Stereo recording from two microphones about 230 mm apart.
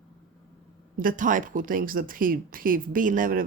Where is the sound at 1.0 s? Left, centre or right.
Right.